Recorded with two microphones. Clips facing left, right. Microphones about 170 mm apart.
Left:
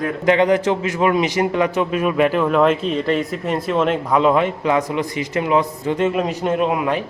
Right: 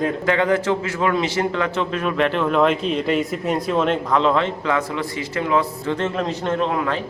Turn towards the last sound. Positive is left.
turn(degrees=15)  # may be behind; listen again after turning